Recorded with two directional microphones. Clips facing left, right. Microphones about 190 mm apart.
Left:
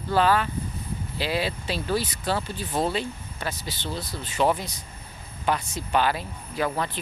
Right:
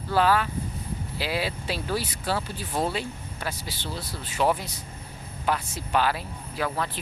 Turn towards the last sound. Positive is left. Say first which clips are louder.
# left 2 dB
turn(degrees=-5)  # may be behind; listen again after turning